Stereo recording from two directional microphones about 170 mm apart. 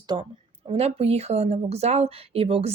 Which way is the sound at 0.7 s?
35° right (ahead or behind).